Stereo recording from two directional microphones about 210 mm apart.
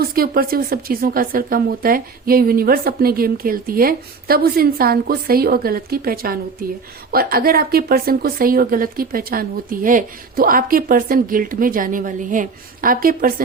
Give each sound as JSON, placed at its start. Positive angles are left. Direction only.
{"t": 0.0, "sound": "speech", "side_deg": -45}